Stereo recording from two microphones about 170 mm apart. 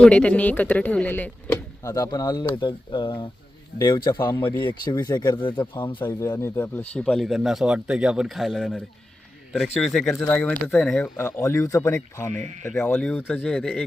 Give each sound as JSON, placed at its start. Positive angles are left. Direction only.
{"t": 0.0, "sound": "speech", "side_deg": 5}
{"t": 12.3, "sound": "speech", "side_deg": -45}
{"t": 12.7, "sound": "speech", "side_deg": 5}